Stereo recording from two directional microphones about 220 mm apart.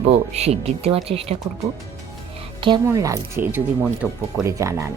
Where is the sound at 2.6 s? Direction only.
20° right (ahead or behind).